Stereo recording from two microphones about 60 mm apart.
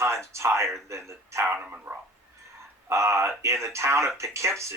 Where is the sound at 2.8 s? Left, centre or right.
Right.